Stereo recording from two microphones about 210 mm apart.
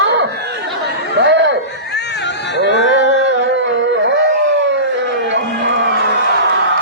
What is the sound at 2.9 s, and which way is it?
Music, 60° right (ahead or behind).